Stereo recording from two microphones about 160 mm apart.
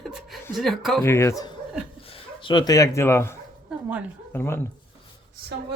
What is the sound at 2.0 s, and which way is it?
Speech, 35° left (ahead or behind).